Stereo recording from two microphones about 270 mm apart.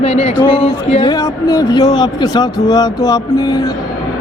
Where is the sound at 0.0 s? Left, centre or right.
Left.